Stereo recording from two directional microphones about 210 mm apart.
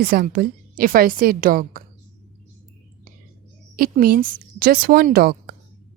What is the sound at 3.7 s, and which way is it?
A woman's voice, 45° right (ahead or behind).